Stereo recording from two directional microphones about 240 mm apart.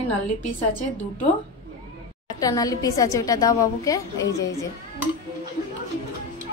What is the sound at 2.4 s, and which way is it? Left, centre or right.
A woman's voice, centre.